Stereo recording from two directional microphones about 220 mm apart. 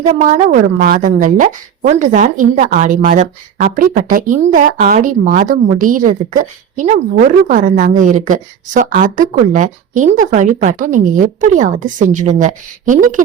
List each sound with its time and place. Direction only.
0.0 s a woman's voice: 35° right (ahead or behind)